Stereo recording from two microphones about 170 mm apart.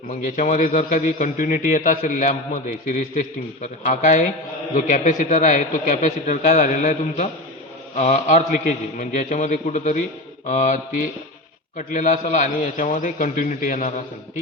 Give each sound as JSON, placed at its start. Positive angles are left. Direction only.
{"t": 0.1, "sound": "a man's voice", "side_deg": 50}